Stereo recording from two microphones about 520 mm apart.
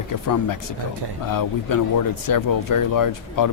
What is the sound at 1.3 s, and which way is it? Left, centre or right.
Speech, left.